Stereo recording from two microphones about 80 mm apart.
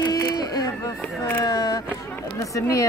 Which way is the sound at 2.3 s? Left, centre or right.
Left.